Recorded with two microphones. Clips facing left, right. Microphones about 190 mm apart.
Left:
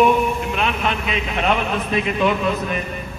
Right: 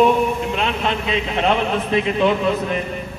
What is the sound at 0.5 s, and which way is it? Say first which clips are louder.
A man's voice: right 1 dB; 25° right (ahead or behind).